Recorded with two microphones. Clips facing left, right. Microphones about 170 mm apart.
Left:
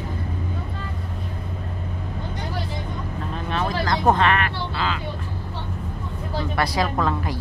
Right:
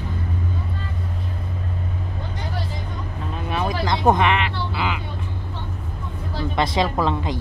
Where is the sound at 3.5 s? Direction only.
10° right (ahead or behind).